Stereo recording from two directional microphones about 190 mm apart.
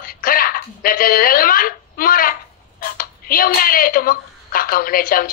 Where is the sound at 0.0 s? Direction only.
50° left (ahead or behind).